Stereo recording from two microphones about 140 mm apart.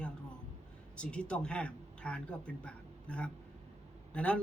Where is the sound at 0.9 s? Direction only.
10° left (ahead or behind).